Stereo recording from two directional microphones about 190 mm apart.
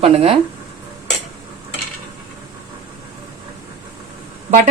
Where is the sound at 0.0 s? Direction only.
30° right (ahead or behind).